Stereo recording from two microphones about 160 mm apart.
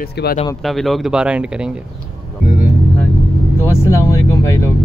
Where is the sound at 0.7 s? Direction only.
Centre (ahead or behind).